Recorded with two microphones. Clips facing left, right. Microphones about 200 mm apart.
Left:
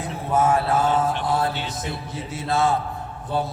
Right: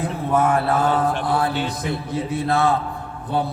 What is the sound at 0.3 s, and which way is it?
Mantra, 60° right (ahead or behind).